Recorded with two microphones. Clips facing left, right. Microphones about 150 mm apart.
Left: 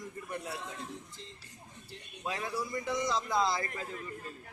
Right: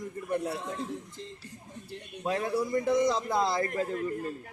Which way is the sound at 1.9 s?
50° right (ahead or behind).